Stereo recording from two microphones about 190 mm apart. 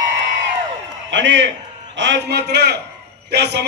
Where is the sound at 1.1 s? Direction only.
70° right (ahead or behind).